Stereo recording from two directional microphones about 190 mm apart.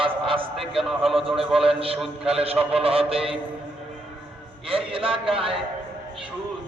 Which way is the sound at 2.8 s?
30° right (ahead or behind).